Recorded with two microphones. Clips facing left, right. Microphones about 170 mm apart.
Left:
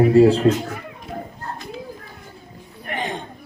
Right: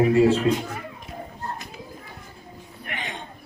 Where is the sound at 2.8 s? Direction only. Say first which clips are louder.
Left 8 dB; 35° left (ahead or behind).